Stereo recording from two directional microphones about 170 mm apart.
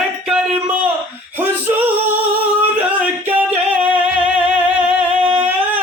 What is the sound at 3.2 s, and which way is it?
Music, 10° right (ahead or behind).